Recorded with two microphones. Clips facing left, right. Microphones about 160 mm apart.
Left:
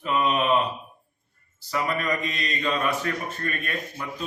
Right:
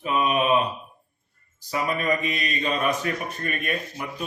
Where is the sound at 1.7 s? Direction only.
20° right (ahead or behind).